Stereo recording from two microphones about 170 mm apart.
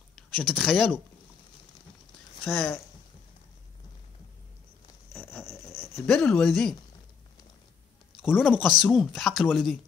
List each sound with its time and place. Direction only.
0.1 s speech: 5° left (ahead or behind)
2.5 s speech: centre (ahead or behind)
5.1 s a sound: 15° left (ahead or behind)
6.0 s speech: 5° left (ahead or behind)
8.4 s speech: 5° right (ahead or behind)